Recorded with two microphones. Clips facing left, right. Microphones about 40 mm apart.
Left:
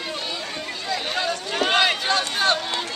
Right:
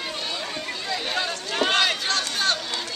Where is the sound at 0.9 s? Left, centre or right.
Centre.